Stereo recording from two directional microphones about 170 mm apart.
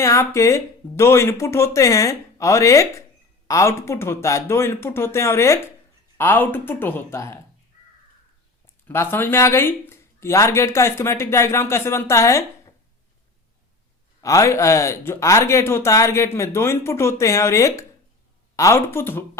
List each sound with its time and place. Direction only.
0.0 s speech: 15° left (ahead or behind)
8.9 s speech: 15° left (ahead or behind)
14.2 s speech: 20° left (ahead or behind)